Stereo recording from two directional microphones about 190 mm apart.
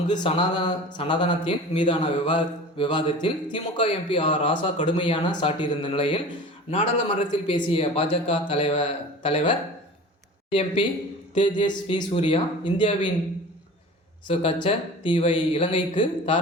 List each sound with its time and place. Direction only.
0.1 s speech: 25° left (ahead or behind)
14.3 s speech: 25° left (ahead or behind)